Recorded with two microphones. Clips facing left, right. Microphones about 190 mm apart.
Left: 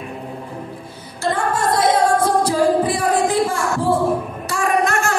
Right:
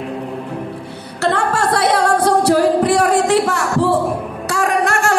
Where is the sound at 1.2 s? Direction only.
70° right (ahead or behind).